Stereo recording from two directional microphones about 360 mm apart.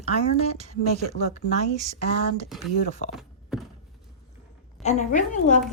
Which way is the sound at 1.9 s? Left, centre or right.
Right.